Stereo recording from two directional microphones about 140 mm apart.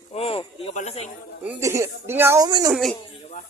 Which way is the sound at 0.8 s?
55° left (ahead or behind).